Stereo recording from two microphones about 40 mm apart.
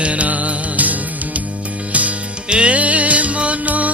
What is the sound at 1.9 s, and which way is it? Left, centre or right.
Jingle bell, right.